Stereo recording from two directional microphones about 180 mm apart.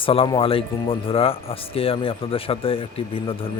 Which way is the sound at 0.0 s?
30° left (ahead or behind).